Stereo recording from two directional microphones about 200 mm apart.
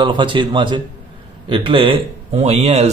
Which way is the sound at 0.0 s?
25° right (ahead or behind).